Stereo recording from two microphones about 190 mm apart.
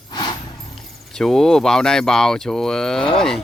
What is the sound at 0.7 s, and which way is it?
Speech, centre (ahead or behind).